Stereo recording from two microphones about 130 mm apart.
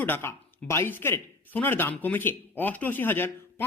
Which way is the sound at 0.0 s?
15° left (ahead or behind).